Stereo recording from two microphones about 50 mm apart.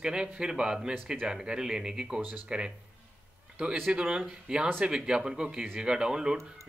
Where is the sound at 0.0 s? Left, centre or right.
Centre.